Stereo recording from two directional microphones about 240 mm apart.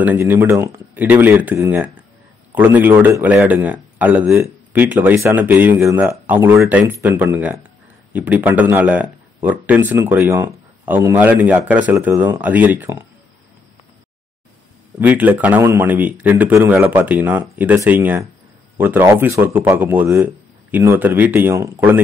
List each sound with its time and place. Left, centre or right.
0.0 s speech: centre
15.0 s speech: centre